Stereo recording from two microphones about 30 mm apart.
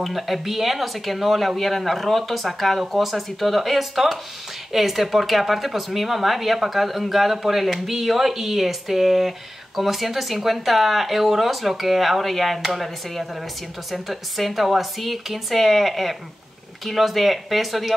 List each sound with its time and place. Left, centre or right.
0.0 s speech: centre